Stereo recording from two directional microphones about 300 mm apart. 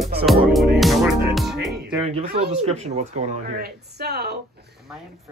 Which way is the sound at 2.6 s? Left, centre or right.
Right.